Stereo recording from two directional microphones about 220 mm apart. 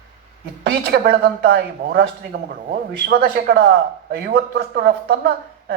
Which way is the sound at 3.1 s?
45° right (ahead or behind).